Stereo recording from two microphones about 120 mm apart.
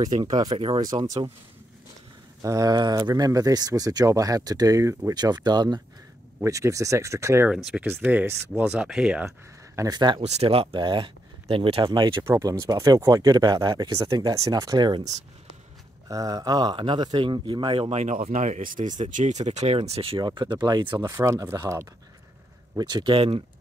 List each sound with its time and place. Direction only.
0.0 s speech: 35° right (ahead or behind)
2.4 s speech: 30° right (ahead or behind)
6.4 s speech: 25° right (ahead or behind)
7.5 s speech: 5° right (ahead or behind)
7.8 s speech: 15° right (ahead or behind)
9.8 s speech: 35° right (ahead or behind)
10.2 s speech: 60° right (ahead or behind); by 15.0 s 40° right (ahead or behind)
16.1 s speech: 30° right (ahead or behind)
17.8 s speech: 75° right (ahead or behind); by 21.8 s 25° right (ahead or behind)
22.8 s speech: 35° right (ahead or behind)